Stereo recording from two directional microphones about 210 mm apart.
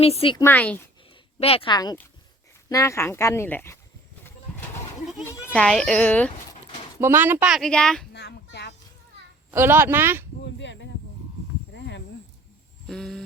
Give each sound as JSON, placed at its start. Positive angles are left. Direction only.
{"t": 0.0, "sound": "speech", "side_deg": 30}
{"t": 0.4, "sound": "speech", "side_deg": 5}
{"t": 1.4, "sound": "speech", "side_deg": 25}
{"t": 5.2, "sound": "a child's voice", "side_deg": 10}
{"t": 7.0, "sound": "speech", "side_deg": -10}
{"t": 8.1, "sound": "a sound", "side_deg": 55}
{"t": 9.5, "sound": "speech", "side_deg": -10}
{"t": 10.4, "sound": "a sound", "side_deg": 55}
{"t": 12.9, "sound": "speech", "side_deg": 0}